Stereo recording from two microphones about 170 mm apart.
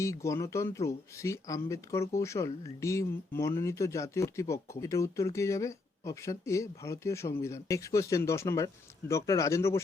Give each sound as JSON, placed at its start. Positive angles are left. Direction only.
{"t": 0.0, "sound": "speech", "side_deg": 15}